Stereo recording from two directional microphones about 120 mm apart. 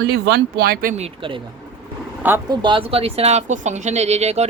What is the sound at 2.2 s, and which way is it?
Speech, 15° right (ahead or behind).